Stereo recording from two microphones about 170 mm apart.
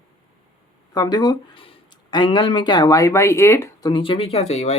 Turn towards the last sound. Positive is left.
turn(degrees=40)  # may be behind; listen again after turning